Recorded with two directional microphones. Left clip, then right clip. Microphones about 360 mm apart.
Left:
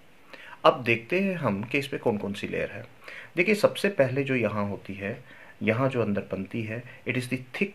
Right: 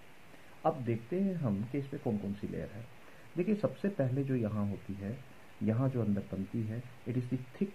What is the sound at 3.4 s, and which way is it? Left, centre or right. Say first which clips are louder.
Speech: left 11 dB; centre.